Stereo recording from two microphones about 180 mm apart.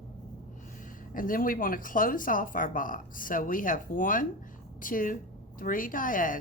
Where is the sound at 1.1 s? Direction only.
50° left (ahead or behind).